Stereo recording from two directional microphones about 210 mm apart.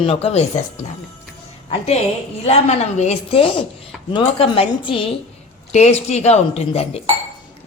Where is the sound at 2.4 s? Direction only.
30° left (ahead or behind).